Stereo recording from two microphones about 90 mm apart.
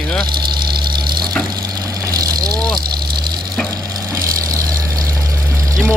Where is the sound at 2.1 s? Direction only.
45° right (ahead or behind).